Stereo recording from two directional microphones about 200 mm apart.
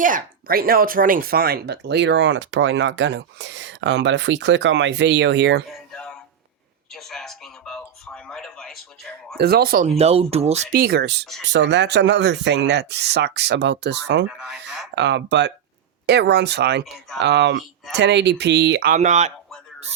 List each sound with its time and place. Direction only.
0.0 s speech: 45° right (ahead or behind); by 5.6 s 60° right (ahead or behind)
5.9 s a sound: 5° left (ahead or behind)
9.4 s speech: 50° right (ahead or behind)
10.0 s speech: 30° right (ahead or behind)
10.8 s speech: 50° right (ahead or behind)
14.3 s speech: 5° right (ahead or behind)
14.9 s speech: 60° right (ahead or behind); by 19.3 s 35° right (ahead or behind)